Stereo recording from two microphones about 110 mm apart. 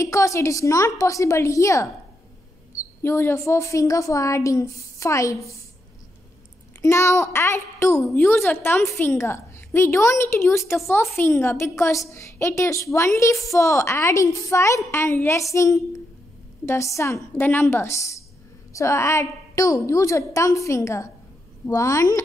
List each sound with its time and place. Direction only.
0.0 s a child's voice: 30° left (ahead or behind)
6.8 s a child's voice: 25° left (ahead or behind)